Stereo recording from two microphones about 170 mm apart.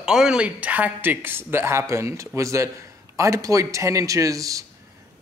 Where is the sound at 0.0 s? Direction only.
5° right (ahead or behind).